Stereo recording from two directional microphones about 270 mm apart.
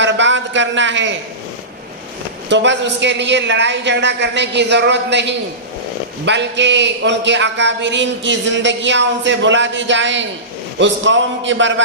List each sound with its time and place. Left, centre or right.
0.0 s a man's voice: right
2.5 s a man's voice: right